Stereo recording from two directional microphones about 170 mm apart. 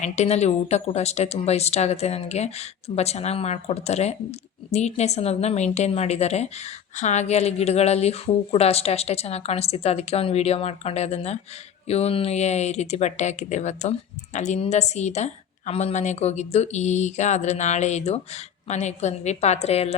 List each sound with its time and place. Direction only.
0.0 s speech: 40° left (ahead or behind)